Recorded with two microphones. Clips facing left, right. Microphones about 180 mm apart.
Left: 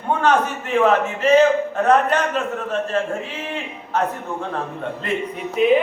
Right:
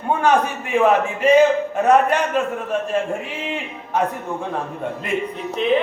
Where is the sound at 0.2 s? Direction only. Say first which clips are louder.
Right 1 dB; 10° right (ahead or behind).